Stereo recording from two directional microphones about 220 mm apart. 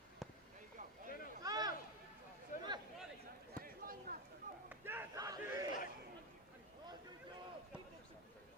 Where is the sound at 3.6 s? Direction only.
40° right (ahead or behind).